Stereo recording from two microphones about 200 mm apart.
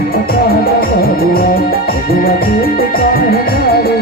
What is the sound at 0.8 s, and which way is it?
Music, 50° left (ahead or behind).